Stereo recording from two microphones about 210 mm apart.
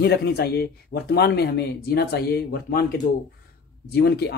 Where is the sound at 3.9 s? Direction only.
50° left (ahead or behind).